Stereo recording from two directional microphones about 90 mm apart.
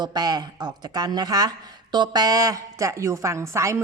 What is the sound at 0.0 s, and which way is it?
A woman's voice, 50° right (ahead or behind).